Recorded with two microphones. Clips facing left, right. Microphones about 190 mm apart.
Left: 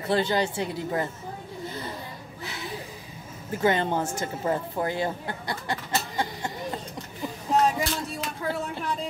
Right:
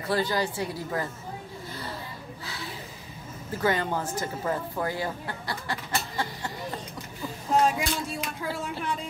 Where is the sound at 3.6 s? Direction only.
25° left (ahead or behind).